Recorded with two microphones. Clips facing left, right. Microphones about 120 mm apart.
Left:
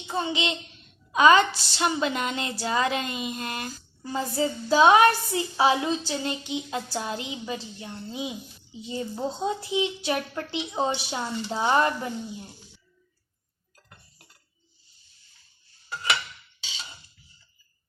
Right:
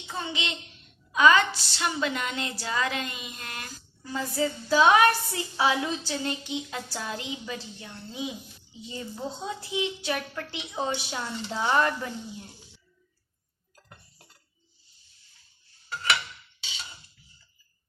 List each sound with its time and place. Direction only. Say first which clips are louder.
0.1 s a woman's voice: left 6 dB; 25° left (ahead or behind)